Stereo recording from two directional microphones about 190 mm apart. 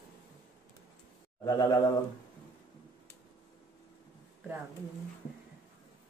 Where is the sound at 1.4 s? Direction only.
20° left (ahead or behind).